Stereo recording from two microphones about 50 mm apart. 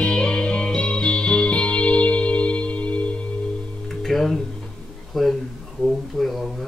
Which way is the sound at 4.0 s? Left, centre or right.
Centre.